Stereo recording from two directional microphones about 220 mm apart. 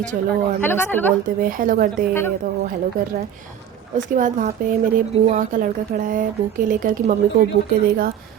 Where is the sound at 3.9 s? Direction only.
35° right (ahead or behind).